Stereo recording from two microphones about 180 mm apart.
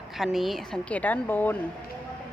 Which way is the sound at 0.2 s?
Centre (ahead or behind).